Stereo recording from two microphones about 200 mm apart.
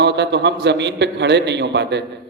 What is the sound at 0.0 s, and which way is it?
A man's voice, 60° right (ahead or behind).